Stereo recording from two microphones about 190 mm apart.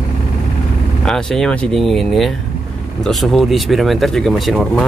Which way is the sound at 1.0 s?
Centre (ahead or behind).